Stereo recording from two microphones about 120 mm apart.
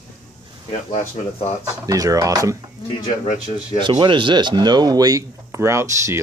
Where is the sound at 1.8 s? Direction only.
30° right (ahead or behind).